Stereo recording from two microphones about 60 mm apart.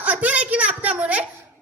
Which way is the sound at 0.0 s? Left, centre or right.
Right.